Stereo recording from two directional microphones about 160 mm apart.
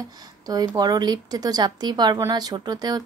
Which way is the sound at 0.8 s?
25° right (ahead or behind).